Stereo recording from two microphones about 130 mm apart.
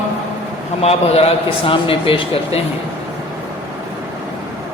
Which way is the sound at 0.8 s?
50° left (ahead or behind).